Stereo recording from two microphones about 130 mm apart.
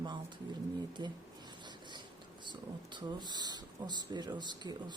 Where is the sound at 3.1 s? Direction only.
35° right (ahead or behind).